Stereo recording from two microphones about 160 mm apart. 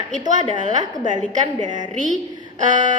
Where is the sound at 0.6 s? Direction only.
50° right (ahead or behind).